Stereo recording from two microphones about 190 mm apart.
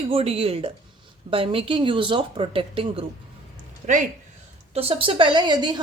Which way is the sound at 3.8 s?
40° right (ahead or behind).